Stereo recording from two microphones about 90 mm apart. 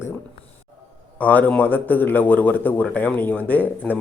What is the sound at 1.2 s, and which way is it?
A man's voice, 15° left (ahead or behind).